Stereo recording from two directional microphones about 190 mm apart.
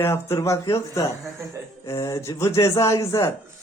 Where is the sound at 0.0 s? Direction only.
15° left (ahead or behind).